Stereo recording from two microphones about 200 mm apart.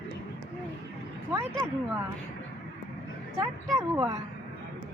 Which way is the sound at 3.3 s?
15° right (ahead or behind).